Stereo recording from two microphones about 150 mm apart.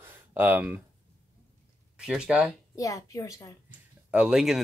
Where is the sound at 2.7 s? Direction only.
20° left (ahead or behind).